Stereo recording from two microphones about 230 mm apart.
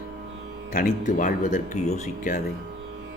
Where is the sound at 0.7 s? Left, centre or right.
Left.